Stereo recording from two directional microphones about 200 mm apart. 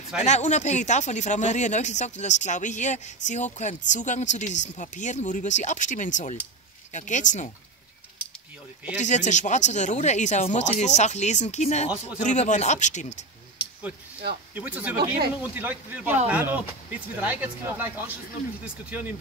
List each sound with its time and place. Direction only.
0.2 s speech: 35° left (ahead or behind)
8.9 s speech: 35° left (ahead or behind)
14.5 s speech: 10° right (ahead or behind)